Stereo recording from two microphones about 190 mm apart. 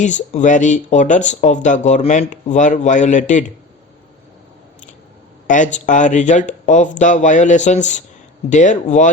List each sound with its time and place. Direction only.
0.0 s speech: 40° left (ahead or behind)
5.5 s speech: 40° left (ahead or behind)